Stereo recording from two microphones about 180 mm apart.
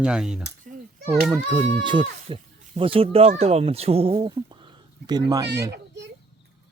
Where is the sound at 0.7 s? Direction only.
50° right (ahead or behind).